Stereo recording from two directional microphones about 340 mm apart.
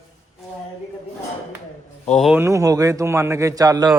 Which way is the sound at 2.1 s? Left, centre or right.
Centre.